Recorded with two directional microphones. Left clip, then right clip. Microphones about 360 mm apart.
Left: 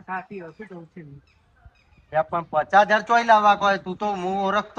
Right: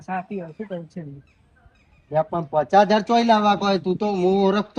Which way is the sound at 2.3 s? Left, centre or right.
Left.